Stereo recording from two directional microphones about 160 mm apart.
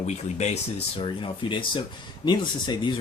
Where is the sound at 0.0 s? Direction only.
45° left (ahead or behind).